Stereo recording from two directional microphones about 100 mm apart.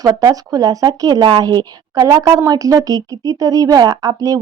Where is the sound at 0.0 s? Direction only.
40° right (ahead or behind).